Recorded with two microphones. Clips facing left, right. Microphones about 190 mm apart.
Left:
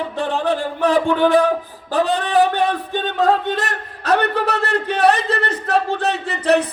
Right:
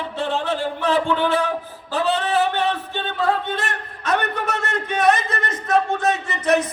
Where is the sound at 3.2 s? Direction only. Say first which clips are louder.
Left 4 dB; 40° left (ahead or behind).